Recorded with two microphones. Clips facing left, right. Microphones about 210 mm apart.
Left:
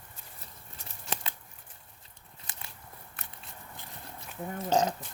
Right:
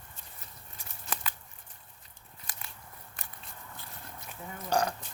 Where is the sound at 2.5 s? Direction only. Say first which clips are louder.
Even; 25° left (ahead or behind).